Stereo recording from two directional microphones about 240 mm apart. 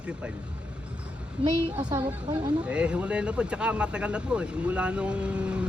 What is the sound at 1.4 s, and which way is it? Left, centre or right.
Speech, centre.